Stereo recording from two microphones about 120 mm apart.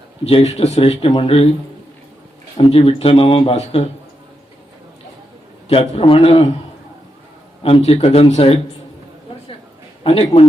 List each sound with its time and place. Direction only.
0.3 s speech: 60° left (ahead or behind)
2.6 s speech: 50° left (ahead or behind)
5.6 s speech: 55° left (ahead or behind)
7.6 s speech: 55° left (ahead or behind)
10.0 s speech: 55° left (ahead or behind)